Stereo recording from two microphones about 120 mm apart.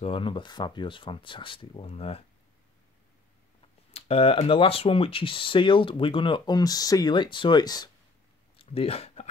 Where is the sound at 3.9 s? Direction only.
60° left (ahead or behind); by 7.9 s 35° left (ahead or behind).